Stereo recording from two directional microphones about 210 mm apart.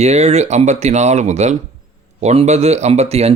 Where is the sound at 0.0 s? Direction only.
30° right (ahead or behind).